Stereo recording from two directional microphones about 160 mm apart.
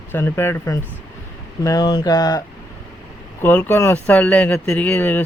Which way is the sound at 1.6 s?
25° left (ahead or behind).